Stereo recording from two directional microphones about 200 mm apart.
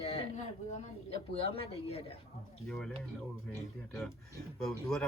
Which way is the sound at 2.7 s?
Centre (ahead or behind).